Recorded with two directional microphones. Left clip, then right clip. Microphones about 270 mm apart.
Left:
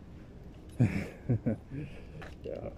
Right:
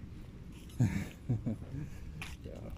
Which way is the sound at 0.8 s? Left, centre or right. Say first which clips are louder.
Left 5 dB; centre.